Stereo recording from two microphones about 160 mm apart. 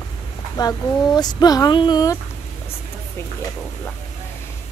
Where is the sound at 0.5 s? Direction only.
25° left (ahead or behind).